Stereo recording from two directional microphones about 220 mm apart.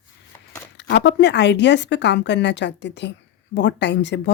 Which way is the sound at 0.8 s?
55° left (ahead or behind).